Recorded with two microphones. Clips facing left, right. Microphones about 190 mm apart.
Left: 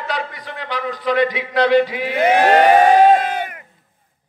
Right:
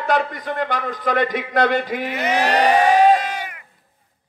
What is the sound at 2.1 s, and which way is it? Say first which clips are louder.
Speech: left 7 dB; 55° left (ahead or behind).